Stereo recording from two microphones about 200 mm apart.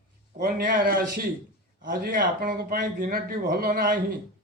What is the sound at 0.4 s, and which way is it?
A man's voice, 45° right (ahead or behind).